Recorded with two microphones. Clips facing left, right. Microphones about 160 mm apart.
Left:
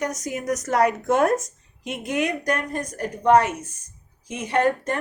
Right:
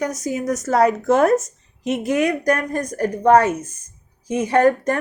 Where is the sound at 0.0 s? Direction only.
10° right (ahead or behind).